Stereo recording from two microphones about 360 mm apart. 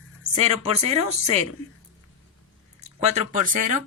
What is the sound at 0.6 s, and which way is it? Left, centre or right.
Speech, centre.